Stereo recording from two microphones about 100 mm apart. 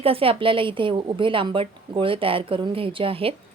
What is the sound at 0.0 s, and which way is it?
A woman's voice, 70° right (ahead or behind).